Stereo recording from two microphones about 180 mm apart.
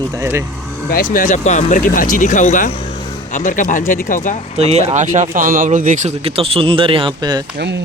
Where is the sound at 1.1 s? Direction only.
45° left (ahead or behind).